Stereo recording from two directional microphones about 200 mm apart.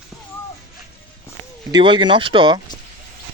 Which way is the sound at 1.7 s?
25° right (ahead or behind).